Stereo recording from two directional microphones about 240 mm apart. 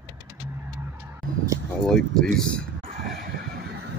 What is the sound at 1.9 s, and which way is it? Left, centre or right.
Speech, centre.